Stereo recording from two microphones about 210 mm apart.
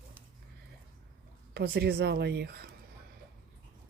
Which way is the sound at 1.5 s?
50° right (ahead or behind).